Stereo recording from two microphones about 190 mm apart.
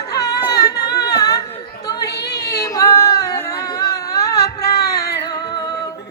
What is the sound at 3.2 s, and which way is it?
Music, 20° left (ahead or behind).